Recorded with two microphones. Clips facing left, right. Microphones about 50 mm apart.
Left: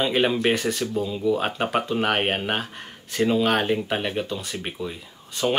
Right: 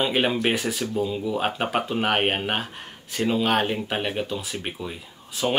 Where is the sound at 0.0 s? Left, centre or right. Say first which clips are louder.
Left 1 dB; centre.